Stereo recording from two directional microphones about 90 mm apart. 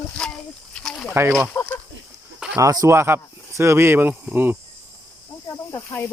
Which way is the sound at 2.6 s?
40° right (ahead or behind).